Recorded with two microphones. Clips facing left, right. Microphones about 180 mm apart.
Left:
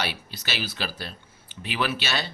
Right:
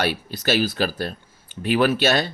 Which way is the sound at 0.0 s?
45° right (ahead or behind).